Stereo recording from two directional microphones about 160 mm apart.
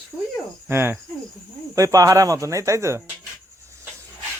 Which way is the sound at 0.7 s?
15° right (ahead or behind).